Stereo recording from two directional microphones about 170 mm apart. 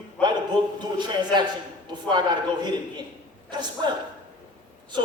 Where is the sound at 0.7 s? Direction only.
25° right (ahead or behind).